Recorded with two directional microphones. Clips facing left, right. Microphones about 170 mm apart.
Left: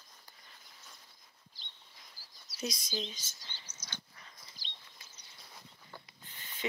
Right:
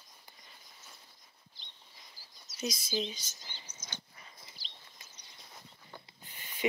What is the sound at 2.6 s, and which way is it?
Speech, 5° right (ahead or behind).